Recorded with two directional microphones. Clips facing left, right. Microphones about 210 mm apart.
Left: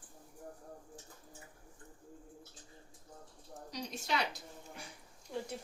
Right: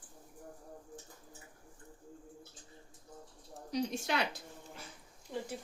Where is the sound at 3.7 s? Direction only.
55° right (ahead or behind).